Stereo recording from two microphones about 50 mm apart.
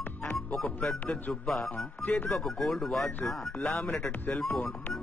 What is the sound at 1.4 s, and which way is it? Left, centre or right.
Speech, centre.